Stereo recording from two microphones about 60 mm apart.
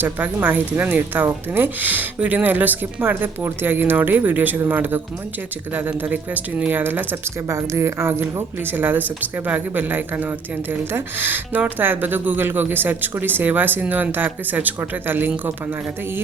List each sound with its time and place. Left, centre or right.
0.0 s speech: right
6.0 s speech: right
7.4 s speech: right